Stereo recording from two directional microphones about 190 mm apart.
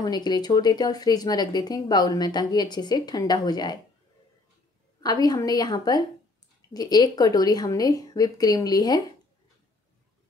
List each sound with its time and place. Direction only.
0.0 s speech: 20° left (ahead or behind)
5.0 s speech: 20° left (ahead or behind)